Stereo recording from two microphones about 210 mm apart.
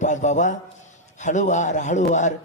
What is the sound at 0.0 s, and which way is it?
A man's voice, 35° left (ahead or behind).